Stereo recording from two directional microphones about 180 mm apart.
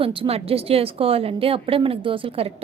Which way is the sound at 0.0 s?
30° right (ahead or behind).